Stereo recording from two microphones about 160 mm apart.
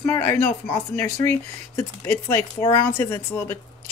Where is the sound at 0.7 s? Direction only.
15° left (ahead or behind).